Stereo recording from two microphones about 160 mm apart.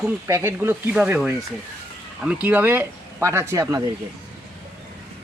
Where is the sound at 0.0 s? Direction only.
15° right (ahead or behind).